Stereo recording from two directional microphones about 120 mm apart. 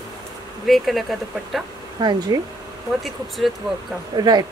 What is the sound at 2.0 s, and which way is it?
Speech, 40° right (ahead or behind).